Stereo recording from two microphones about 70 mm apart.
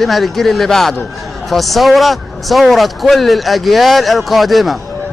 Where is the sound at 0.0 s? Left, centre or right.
Centre.